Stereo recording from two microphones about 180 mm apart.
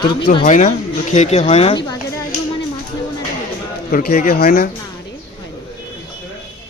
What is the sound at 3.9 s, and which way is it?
Speech, 55° left (ahead or behind).